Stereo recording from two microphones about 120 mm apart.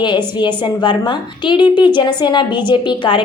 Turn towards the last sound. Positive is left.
turn(degrees=40)  # may be behind; listen again after turning